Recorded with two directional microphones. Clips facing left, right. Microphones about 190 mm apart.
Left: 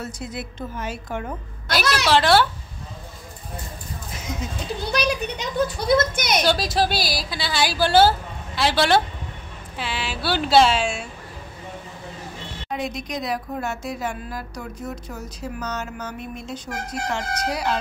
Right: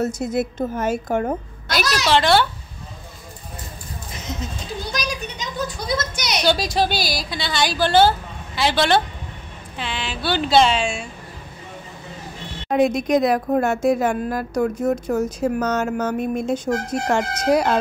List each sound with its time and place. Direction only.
0.0 s a woman's voice: 45° right (ahead or behind)
2.0 s a woman's voice: 5° left (ahead or behind)
4.1 s a sound: 10° left (ahead or behind)
4.9 s a child's voice: 60° left (ahead or behind)
6.4 s a woman's voice: centre (ahead or behind)
12.6 s a woman's voice: 50° right (ahead or behind)